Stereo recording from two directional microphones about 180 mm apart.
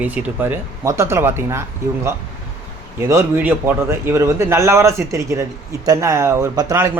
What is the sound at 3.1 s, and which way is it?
A man's voice, 15° right (ahead or behind).